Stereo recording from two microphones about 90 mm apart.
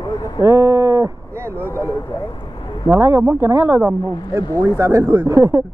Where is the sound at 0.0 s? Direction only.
55° left (ahead or behind).